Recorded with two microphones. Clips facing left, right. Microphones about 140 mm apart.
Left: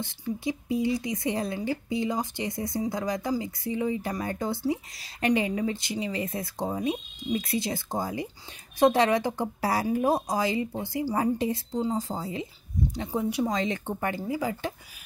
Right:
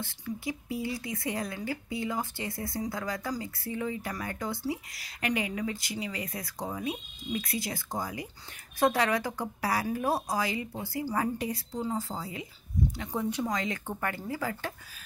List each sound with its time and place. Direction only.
0.2 s speech: 20° left (ahead or behind)
13.1 s speech: 15° left (ahead or behind)
13.6 s speech: 25° left (ahead or behind)